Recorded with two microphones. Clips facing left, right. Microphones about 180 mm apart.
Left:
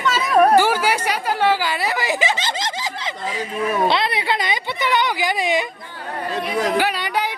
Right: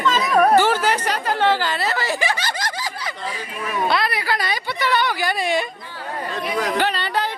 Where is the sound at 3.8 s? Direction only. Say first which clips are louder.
Left 2 dB; 25° left (ahead or behind).